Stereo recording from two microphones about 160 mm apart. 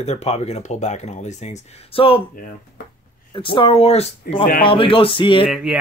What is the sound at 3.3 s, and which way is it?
Speech, 30° left (ahead or behind).